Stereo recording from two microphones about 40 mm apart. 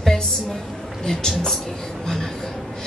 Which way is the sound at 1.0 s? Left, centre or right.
Centre.